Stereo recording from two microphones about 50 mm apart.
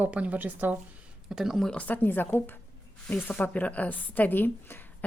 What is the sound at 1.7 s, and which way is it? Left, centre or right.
Speech, left.